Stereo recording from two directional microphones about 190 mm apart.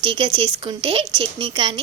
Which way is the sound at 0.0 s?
25° right (ahead or behind).